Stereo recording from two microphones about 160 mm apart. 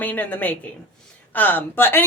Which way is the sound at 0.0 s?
10° left (ahead or behind).